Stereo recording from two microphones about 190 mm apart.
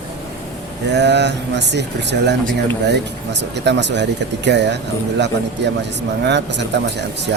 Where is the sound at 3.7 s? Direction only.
65° right (ahead or behind).